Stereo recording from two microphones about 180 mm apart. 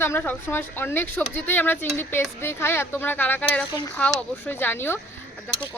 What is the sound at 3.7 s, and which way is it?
Speech, 20° left (ahead or behind).